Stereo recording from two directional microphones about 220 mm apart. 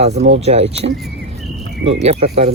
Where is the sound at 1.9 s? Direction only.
30° right (ahead or behind).